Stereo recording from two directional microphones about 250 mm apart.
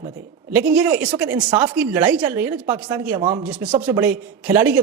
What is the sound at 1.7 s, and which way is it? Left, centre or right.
Speech, centre.